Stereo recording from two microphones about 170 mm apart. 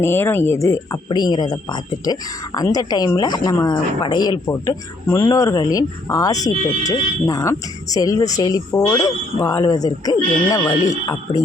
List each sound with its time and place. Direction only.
0.0 s speech: 15° left (ahead or behind)